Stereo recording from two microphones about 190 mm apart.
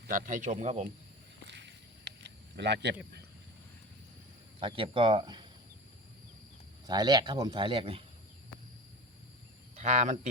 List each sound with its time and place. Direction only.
0.1 s speech: 45° right (ahead or behind)
1.5 s a sound: 65° right (ahead or behind)
4.6 s speech: 25° right (ahead or behind)
6.8 s speech: 20° right (ahead or behind)
9.7 s speech: 35° right (ahead or behind)